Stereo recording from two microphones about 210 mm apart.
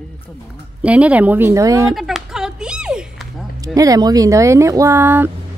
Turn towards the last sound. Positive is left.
turn(degrees=-10)  # may be behind; listen again after turning